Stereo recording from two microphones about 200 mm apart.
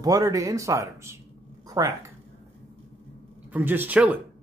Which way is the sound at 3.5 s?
10° right (ahead or behind).